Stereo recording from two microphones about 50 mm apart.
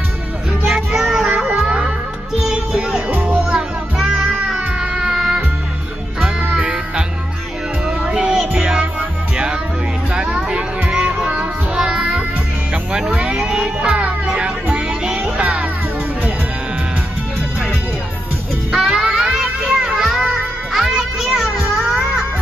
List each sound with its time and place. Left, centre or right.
0.7 s music: centre
1.1 s child singing: centre
1.5 s music: centre
3.1 s music: right
3.3 s music: centre
6.5 s music: centre
10.1 s child singing: centre
12.9 s music: centre
15.3 s music: right
18.7 s music: centre